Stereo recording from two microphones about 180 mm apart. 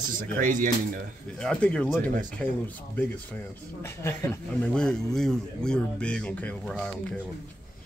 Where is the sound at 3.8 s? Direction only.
15° left (ahead or behind).